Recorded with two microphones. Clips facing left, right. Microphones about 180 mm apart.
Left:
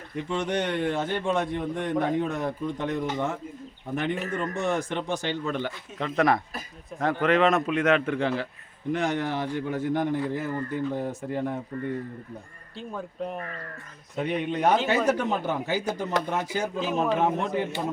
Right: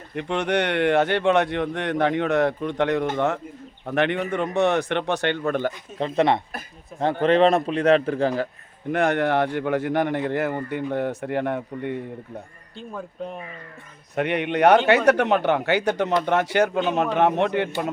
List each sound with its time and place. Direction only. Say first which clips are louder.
0.2 s speech: right 4 dB; 70° right (ahead or behind); by 5.7 s 50° right (ahead or behind)
6.0 s a man's voice: right 3 dB; 30° right (ahead or behind)
8.9 s speech: right 6 dB; 60° right (ahead or behind)
12.7 s speech: right 1 dB; centre (ahead or behind)
14.2 s speech: right 6 dB; 70° right (ahead or behind)